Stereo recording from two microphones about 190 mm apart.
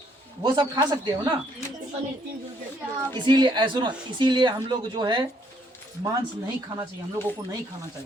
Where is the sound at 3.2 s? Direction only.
25° right (ahead or behind).